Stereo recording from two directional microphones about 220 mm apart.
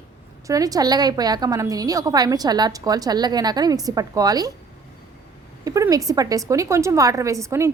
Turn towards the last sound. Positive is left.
turn(degrees=-15)  # may be behind; listen again after turning